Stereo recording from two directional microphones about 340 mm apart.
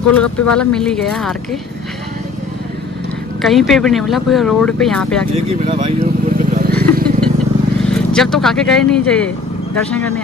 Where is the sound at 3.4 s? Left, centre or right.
Centre.